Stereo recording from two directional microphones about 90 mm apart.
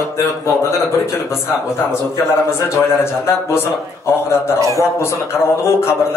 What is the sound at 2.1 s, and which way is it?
A man's voice, 30° left (ahead or behind).